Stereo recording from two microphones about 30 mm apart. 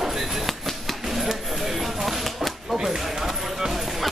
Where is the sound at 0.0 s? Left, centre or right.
Centre.